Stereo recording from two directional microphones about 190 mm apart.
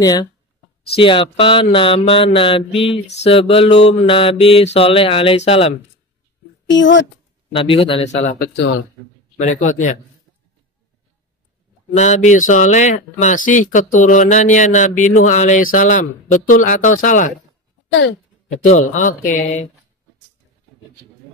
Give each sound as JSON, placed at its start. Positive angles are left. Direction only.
{"t": 0.0, "sound": "mantra", "side_deg": 20}
{"t": 3.3, "sound": "speech", "side_deg": 30}
{"t": 4.1, "sound": "mantra", "side_deg": 30}
{"t": 6.7, "sound": "speech", "side_deg": 75}
{"t": 7.5, "sound": "mantra", "side_deg": 30}
{"t": 8.2, "sound": "speech", "side_deg": 45}
{"t": 11.9, "sound": "speech", "side_deg": 40}
{"t": 18.5, "sound": "speech", "side_deg": 40}